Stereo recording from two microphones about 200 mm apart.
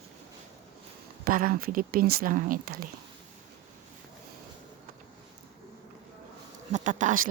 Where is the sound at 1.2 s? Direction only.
45° right (ahead or behind).